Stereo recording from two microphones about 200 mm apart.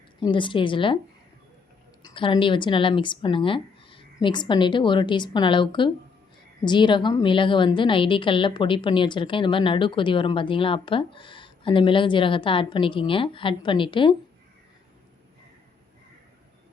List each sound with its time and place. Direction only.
0.2 s a woman's voice: 25° left (ahead or behind)
2.1 s a woman's voice: 25° left (ahead or behind)